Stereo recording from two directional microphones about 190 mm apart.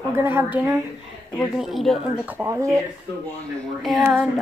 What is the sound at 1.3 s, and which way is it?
Speech, centre (ahead or behind).